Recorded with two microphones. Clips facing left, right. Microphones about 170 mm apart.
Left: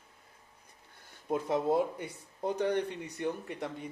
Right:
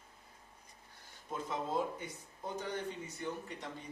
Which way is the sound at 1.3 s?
65° left (ahead or behind).